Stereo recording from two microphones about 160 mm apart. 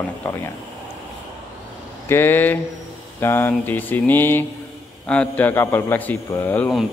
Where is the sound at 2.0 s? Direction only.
15° left (ahead or behind).